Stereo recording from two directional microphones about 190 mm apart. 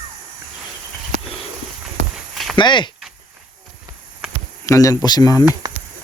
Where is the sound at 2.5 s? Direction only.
25° left (ahead or behind).